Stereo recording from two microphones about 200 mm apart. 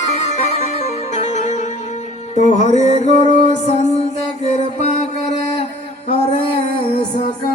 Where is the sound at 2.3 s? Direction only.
35° left (ahead or behind).